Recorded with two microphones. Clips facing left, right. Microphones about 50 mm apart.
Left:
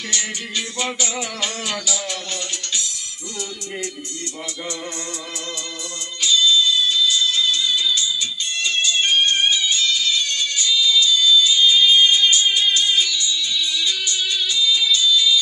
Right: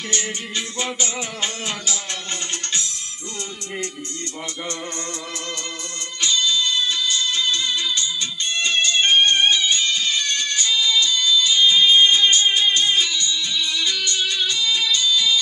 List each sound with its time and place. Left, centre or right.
0.1 s music: right
6.2 s music: right